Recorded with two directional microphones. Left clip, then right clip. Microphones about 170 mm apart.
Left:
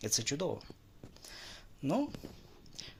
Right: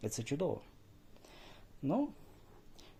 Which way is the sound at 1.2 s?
10° right (ahead or behind).